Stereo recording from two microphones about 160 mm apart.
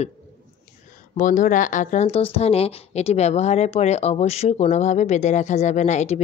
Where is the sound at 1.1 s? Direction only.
55° left (ahead or behind).